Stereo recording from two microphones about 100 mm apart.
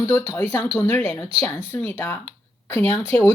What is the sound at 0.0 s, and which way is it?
Speech, 25° left (ahead or behind).